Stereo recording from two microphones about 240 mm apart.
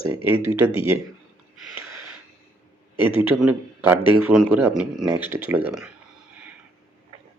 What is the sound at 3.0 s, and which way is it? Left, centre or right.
Speech, left.